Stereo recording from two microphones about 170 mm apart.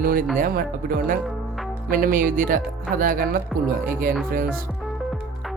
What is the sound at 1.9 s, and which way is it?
Speech, 55° right (ahead or behind).